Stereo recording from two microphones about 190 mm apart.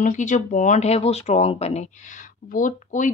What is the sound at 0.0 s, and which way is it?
A woman's voice, 40° left (ahead or behind).